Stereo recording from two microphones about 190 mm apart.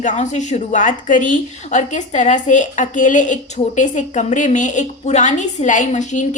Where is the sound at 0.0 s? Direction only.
40° left (ahead or behind).